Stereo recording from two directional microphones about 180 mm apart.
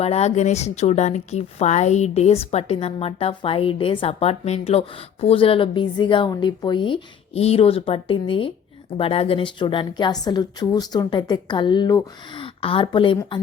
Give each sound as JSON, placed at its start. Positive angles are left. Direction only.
{"t": 0.0, "sound": "a woman's voice", "side_deg": 35}